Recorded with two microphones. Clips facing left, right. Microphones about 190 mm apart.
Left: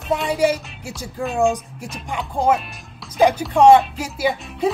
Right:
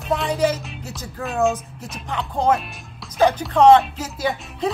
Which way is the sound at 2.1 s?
10° left (ahead or behind).